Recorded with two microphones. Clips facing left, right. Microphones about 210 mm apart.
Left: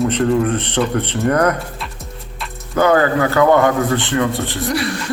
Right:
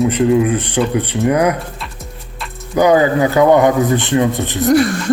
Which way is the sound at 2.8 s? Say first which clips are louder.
Right 3 dB; 15° right (ahead or behind).